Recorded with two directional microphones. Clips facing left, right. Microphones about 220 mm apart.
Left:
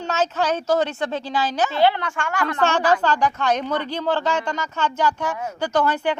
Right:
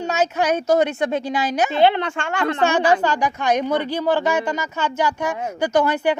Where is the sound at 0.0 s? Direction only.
10° right (ahead or behind).